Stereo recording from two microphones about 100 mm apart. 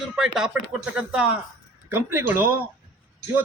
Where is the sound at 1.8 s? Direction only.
20° right (ahead or behind).